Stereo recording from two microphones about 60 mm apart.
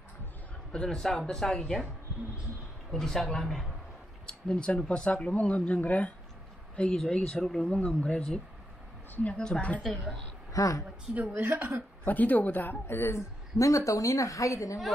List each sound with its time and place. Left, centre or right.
0.7 s speech: centre
2.9 s a woman's voice: centre; by 6.1 s left
6.8 s speech: centre
7.4 s a woman's voice: centre
7.7 s a woman's voice: centre
9.8 s a woman's voice: centre
10.5 s a woman's voice: left
11.1 s speech: right
12.0 s a woman's voice: left
13.6 s a woman's voice: left